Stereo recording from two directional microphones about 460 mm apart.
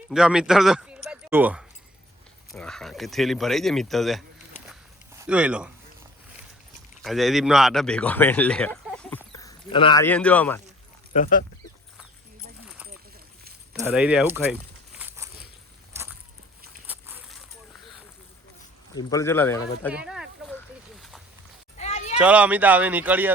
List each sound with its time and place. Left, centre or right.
0.1 s speech: centre
4.7 s walk: centre
7.0 s speech: centre
11.1 s speech: centre
12.6 s a sound: centre
18.9 s speech: centre
20.9 s a sound: centre
21.8 s a sound: centre
22.2 s speech: centre